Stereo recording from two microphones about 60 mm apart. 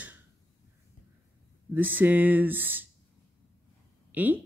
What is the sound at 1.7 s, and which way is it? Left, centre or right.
Speech, right.